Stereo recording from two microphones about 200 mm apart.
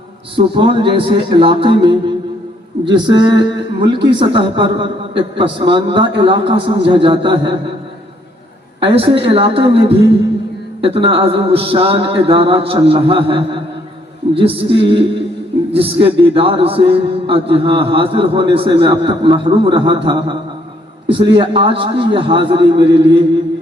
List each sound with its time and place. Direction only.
0.3 s a man's voice: 25° right (ahead or behind)
8.8 s a man's voice: 25° right (ahead or behind)